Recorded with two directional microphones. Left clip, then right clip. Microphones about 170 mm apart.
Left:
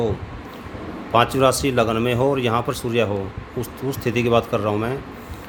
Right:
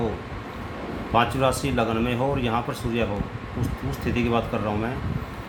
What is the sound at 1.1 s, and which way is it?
Speech, 65° left (ahead or behind).